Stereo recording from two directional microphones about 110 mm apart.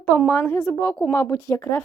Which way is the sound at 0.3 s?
20° left (ahead or behind).